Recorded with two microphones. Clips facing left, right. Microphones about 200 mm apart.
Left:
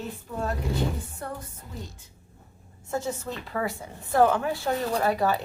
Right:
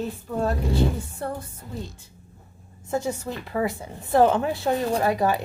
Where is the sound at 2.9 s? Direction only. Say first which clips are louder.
Right 3 dB; 15° right (ahead or behind).